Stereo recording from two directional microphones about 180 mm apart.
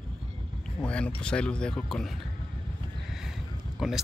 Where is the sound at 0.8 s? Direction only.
5° left (ahead or behind).